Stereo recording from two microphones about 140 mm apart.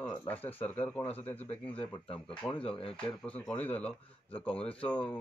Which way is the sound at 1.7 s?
40° left (ahead or behind).